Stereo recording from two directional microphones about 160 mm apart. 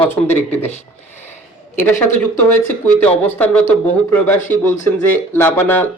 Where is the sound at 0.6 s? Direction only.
45° left (ahead or behind).